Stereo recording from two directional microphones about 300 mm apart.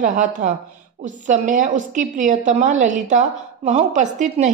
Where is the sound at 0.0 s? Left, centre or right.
Right.